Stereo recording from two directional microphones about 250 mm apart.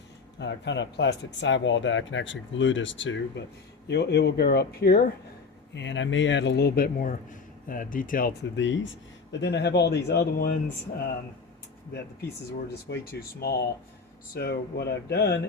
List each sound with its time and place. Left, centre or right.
0.3 s a man's voice: left
12.9 s a man's voice: left